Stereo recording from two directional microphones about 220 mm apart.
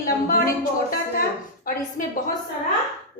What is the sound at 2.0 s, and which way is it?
Speech, 40° left (ahead or behind).